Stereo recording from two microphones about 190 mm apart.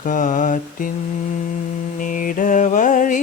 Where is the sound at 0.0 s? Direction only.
45° left (ahead or behind).